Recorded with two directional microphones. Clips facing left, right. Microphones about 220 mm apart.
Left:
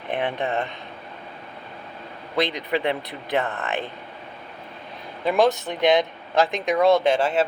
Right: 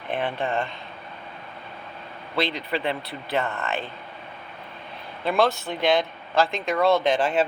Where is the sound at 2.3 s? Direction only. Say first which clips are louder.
Left 3 dB; 15° left (ahead or behind).